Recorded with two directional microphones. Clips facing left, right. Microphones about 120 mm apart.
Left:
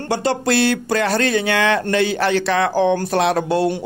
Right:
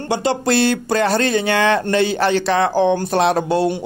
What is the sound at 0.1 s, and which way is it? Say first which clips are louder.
Speech: right 1 dB; 20° right (ahead or behind).